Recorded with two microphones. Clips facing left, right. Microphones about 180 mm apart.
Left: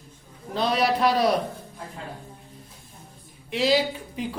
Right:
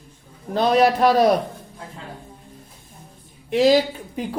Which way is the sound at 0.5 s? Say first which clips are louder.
Right 6 dB; 45° right (ahead or behind).